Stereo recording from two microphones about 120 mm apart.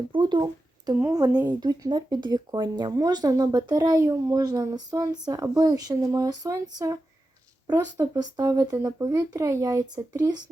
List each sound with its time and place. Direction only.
0.1 s speech: 40° right (ahead or behind)
8.2 s speech: 30° right (ahead or behind)